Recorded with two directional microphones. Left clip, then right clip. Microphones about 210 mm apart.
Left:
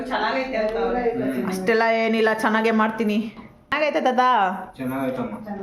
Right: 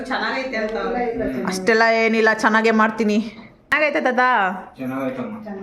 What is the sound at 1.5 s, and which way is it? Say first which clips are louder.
A woman's voice: right 4 dB; 20° right (ahead or behind).